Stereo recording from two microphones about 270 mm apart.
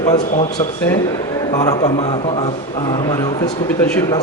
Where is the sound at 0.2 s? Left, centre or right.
Left.